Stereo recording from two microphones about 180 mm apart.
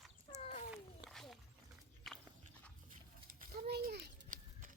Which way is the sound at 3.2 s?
60° right (ahead or behind).